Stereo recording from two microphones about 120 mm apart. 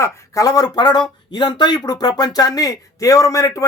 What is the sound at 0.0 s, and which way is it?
Speech, 25° left (ahead or behind).